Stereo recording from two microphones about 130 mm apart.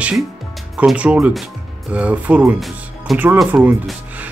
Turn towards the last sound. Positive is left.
turn(degrees=-15)  # may be behind; listen again after turning